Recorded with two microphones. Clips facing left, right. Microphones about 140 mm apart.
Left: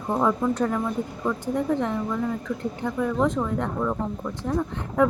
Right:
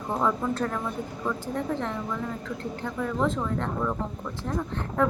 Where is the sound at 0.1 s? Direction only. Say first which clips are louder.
Left 4 dB; 15° left (ahead or behind).